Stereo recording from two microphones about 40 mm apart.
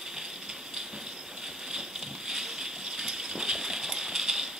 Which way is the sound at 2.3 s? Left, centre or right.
Centre.